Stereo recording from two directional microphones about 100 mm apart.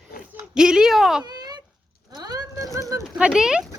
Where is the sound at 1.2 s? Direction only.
45° right (ahead or behind).